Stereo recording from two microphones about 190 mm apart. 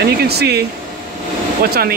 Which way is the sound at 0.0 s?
60° right (ahead or behind).